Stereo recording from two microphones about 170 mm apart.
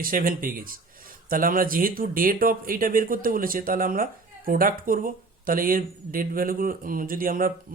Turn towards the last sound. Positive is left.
turn(degrees=-55)  # may be behind; listen again after turning